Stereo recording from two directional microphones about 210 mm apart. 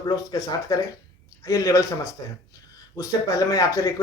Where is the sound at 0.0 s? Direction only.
20° left (ahead or behind).